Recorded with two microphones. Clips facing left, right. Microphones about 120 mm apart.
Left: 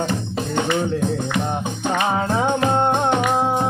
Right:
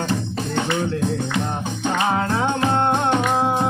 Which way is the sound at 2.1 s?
15° left (ahead or behind).